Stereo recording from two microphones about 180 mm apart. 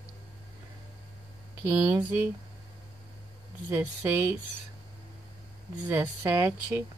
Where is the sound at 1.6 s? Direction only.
15° right (ahead or behind).